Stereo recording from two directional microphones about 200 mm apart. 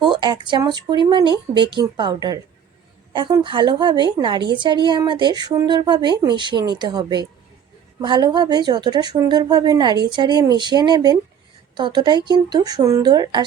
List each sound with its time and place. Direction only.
0.0 s a woman's voice: 25° right (ahead or behind)